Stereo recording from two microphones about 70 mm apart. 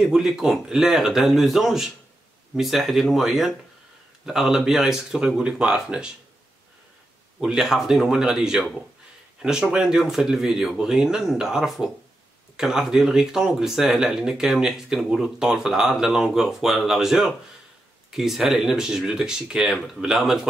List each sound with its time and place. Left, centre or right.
0.0 s speech: centre
7.3 s speech: centre